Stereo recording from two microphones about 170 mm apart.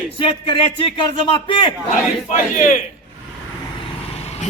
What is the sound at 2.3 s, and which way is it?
Speech, 50° left (ahead or behind).